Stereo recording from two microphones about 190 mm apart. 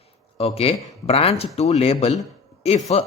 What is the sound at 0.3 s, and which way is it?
Speech, 30° left (ahead or behind).